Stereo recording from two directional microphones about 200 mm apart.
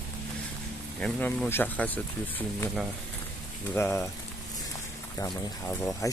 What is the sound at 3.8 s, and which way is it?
Speech, 15° left (ahead or behind).